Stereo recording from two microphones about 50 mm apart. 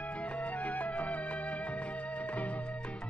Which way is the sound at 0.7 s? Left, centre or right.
Left.